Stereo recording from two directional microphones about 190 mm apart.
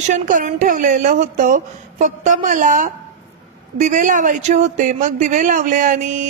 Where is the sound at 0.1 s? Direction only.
40° right (ahead or behind).